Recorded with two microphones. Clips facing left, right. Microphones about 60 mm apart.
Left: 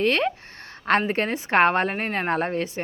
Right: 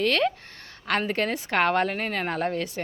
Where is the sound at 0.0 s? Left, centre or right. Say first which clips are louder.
Left 1 dB; left.